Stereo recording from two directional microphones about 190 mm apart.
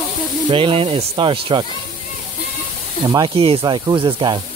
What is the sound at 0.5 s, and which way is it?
Speech, 30° right (ahead or behind).